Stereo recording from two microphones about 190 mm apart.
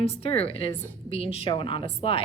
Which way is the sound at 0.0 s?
30° left (ahead or behind).